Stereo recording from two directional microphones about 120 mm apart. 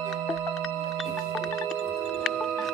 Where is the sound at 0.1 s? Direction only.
Centre (ahead or behind).